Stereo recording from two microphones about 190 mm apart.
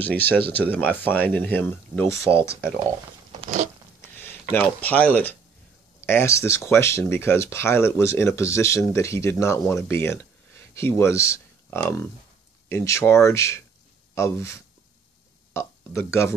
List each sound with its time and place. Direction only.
0.0 s speech: 10° left (ahead or behind)
3.3 s a sound: 40° right (ahead or behind)
4.0 s speech: 10° left (ahead or behind)